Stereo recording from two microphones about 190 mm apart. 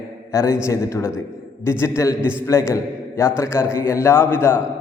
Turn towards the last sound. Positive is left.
turn(degrees=10)  # may be behind; listen again after turning